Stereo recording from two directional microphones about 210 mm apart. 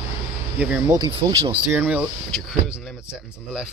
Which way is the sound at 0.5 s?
5° right (ahead or behind).